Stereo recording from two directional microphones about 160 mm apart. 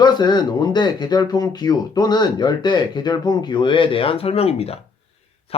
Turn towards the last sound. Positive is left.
turn(degrees=40)  # may be behind; listen again after turning